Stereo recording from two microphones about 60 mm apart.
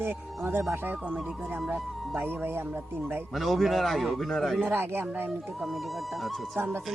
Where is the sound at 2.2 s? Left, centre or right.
Right.